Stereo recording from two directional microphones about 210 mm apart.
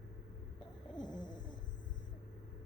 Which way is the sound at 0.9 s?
20° left (ahead or behind).